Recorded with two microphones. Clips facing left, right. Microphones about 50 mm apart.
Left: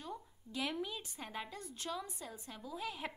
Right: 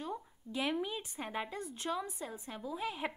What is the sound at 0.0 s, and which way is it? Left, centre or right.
A woman's voice, centre.